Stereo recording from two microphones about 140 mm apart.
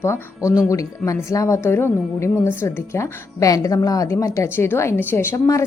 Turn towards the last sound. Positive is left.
turn(degrees=20)  # may be behind; listen again after turning